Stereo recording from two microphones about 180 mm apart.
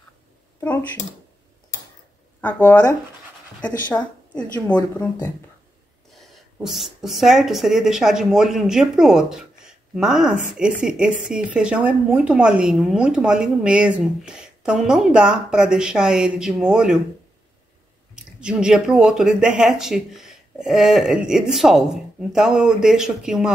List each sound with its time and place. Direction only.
0.6 s speech: 10° left (ahead or behind)
3.6 s speech: 5° left (ahead or behind)
4.7 s speech: 20° left (ahead or behind)
6.1 s speech: centre (ahead or behind)
18.1 s speech: 5° right (ahead or behind)